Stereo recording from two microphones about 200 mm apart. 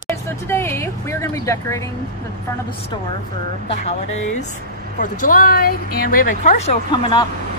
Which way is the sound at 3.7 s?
35° left (ahead or behind).